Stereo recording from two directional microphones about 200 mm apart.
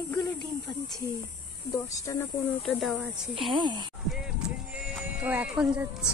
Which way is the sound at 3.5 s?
25° right (ahead or behind).